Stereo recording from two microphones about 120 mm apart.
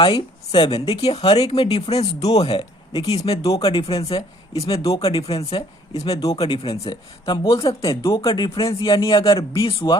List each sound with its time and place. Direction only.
0.0 s speech: 45° left (ahead or behind)
3.1 s speech: 55° left (ahead or behind)
3.4 s speech: 30° left (ahead or behind)
3.7 s speech: 50° left (ahead or behind)
4.8 s speech: 30° left (ahead or behind)
5.0 s speech: 50° left (ahead or behind)
7.4 s speech: 30° left (ahead or behind)
7.7 s speech: 50° left (ahead or behind)